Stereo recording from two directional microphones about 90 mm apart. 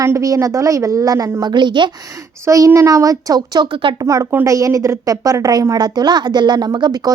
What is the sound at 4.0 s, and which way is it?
A woman's voice, 40° right (ahead or behind).